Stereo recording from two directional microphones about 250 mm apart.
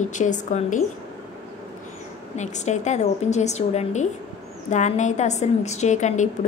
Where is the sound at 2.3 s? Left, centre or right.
Left.